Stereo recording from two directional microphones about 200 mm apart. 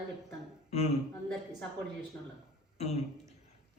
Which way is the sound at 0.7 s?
35° left (ahead or behind).